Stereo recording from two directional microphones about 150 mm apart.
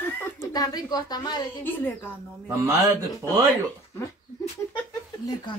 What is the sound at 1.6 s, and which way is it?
Speech, 15° left (ahead or behind).